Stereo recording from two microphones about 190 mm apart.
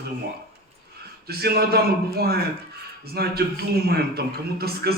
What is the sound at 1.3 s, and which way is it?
A man's voice, 55° right (ahead or behind).